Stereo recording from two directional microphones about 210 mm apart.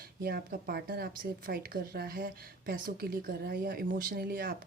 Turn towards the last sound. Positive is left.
turn(degrees=-45)  # may be behind; listen again after turning